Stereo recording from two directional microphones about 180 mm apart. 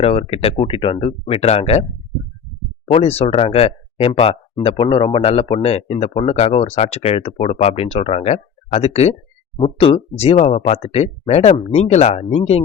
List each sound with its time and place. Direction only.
0.0 s speech: 35° left (ahead or behind)
2.9 s speech: 35° left (ahead or behind)